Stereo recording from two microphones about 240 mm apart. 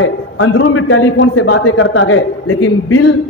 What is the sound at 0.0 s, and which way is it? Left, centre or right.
A man's voice, left.